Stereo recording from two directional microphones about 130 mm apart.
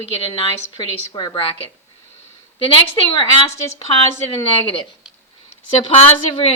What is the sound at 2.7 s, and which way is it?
Speech, 40° left (ahead or behind).